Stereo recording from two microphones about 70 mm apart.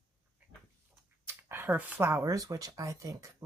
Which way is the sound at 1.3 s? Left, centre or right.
Right.